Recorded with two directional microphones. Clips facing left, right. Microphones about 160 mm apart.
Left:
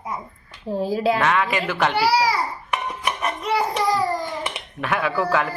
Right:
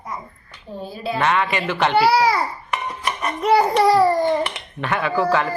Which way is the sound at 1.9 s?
55° right (ahead or behind).